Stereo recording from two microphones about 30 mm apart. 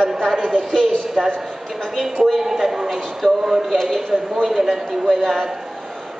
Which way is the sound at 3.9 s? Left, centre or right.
Centre.